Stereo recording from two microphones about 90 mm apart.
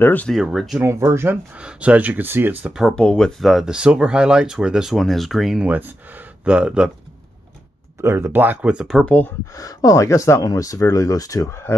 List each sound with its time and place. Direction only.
0.0 s speech: 20° left (ahead or behind)
0.3 s speech: centre (ahead or behind)
0.7 s speech: 30° right (ahead or behind)
1.6 s speech: 15° right (ahead or behind)
3.0 s speech: 10° left (ahead or behind); by 6.9 s 10° right (ahead or behind)
8.0 s speech: 30° right (ahead or behind)
9.0 s speech: 15° left (ahead or behind)
9.6 s speech: 40° left (ahead or behind)